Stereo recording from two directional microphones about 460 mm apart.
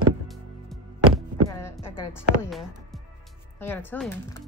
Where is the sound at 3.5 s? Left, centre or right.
Centre.